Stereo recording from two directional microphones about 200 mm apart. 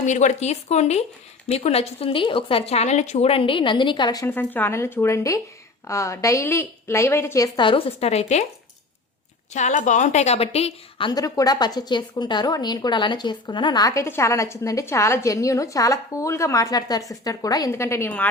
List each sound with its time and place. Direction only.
0.0 s a woman's voice: 35° left (ahead or behind)
9.5 s a woman's voice: 35° left (ahead or behind); by 18.3 s 10° left (ahead or behind)